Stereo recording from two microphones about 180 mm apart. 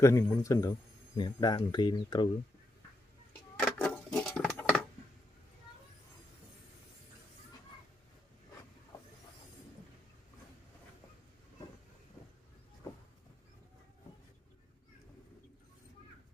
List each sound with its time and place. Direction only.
0.0 s a man's voice: 15° left (ahead or behind)
3.6 s keys jangling: 5° left (ahead or behind)